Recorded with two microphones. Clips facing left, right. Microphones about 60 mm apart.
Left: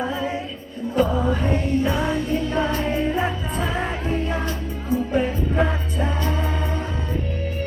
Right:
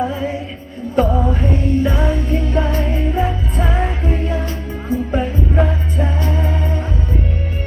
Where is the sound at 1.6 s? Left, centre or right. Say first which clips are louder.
Right 4 dB; right.